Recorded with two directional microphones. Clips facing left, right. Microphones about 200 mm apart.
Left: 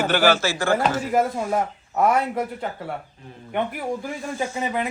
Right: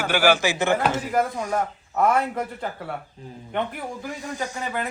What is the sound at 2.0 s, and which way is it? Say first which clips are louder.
Speech: left 1 dB; 5° left (ahead or behind).